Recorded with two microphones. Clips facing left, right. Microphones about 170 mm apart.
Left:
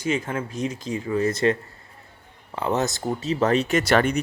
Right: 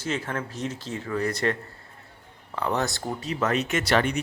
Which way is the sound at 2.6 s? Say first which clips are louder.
Left 3 dB; 20° left (ahead or behind).